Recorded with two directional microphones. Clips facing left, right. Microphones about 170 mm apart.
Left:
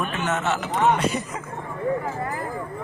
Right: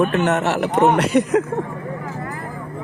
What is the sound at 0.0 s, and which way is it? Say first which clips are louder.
Speech: right 8 dB; 60° right (ahead or behind).